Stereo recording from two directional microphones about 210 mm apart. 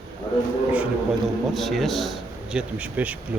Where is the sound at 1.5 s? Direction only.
Centre (ahead or behind).